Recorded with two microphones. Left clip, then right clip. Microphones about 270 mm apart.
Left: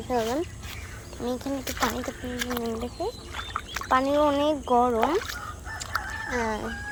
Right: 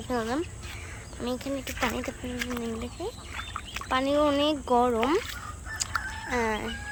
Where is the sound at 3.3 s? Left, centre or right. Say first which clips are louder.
Left 3 dB; left.